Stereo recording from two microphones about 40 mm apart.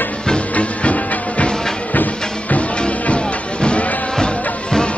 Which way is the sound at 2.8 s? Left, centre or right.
Left.